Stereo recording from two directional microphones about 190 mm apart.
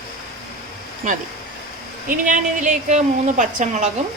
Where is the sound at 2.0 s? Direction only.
45° right (ahead or behind).